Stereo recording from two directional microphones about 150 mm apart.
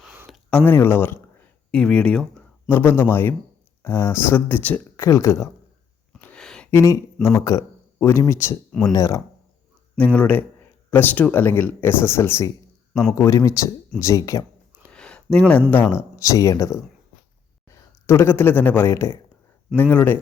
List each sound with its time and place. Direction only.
0.6 s speech: 15° left (ahead or behind)
5.0 s speech: 20° left (ahead or behind)
6.1 s a sound: 10° left (ahead or behind)
6.7 s speech: 20° left (ahead or behind)
10.0 s speech: 10° left (ahead or behind)
12.9 s speech: centre (ahead or behind)
13.1 s speech: 20° left (ahead or behind)
14.8 s a sound: 5° left (ahead or behind)
15.7 s speech: 15° left (ahead or behind)